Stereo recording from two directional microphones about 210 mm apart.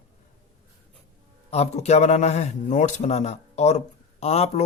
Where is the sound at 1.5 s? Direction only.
30° left (ahead or behind).